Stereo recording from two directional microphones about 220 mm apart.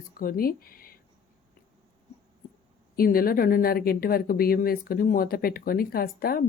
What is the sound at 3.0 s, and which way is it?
Speech, 40° left (ahead or behind).